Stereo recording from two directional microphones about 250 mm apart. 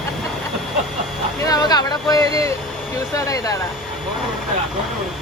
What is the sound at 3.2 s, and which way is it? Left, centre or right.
Speech, centre.